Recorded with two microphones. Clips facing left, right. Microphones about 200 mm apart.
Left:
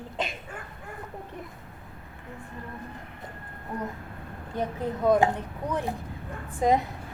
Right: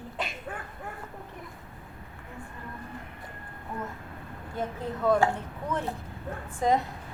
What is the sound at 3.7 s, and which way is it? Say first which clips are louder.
Speech: left 3 dB; 20° left (ahead or behind).